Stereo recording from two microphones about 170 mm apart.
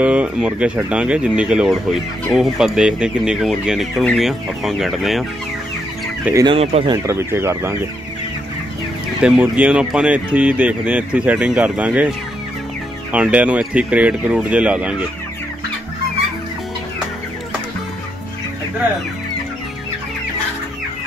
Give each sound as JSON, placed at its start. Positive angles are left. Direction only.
{"t": 0.0, "sound": "speech", "side_deg": -5}
{"t": 6.4, "sound": "speech", "side_deg": -35}
{"t": 7.1, "sound": "speech", "side_deg": -15}
{"t": 9.2, "sound": "speech", "side_deg": -5}
{"t": 13.1, "sound": "speech", "side_deg": -5}